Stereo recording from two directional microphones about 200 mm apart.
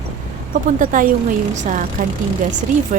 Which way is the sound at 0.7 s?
40° right (ahead or behind).